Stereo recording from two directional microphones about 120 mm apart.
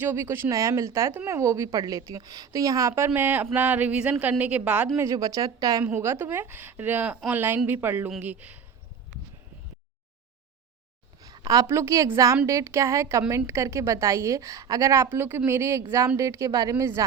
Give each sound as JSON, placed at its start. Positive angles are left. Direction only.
{"t": 0.0, "sound": "a woman's voice", "side_deg": -20}
{"t": 4.9, "sound": "a woman's voice", "side_deg": -25}
{"t": 11.4, "sound": "a woman's voice", "side_deg": -25}